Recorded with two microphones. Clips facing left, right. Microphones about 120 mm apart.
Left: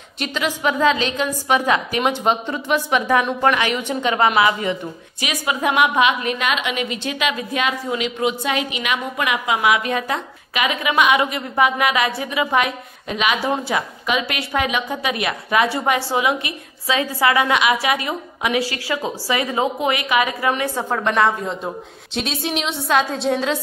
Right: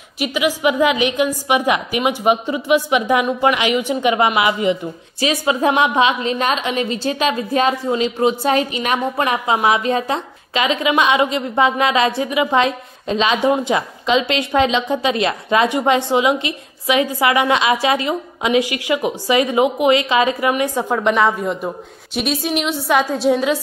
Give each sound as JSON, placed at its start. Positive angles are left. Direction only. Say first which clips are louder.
{"t": 0.2, "sound": "a woman's voice", "louder": "right 4 dB", "side_deg": -10}
{"t": 5.2, "sound": "a woman's voice", "louder": "right 5 dB", "side_deg": -30}